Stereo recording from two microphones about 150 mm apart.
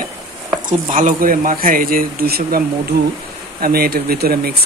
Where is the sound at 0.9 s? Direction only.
65° right (ahead or behind).